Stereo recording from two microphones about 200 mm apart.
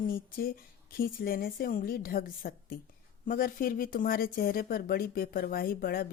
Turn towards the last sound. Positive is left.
turn(degrees=45)  # may be behind; listen again after turning